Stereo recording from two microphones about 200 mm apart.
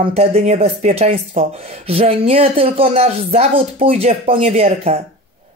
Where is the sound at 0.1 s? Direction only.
30° right (ahead or behind).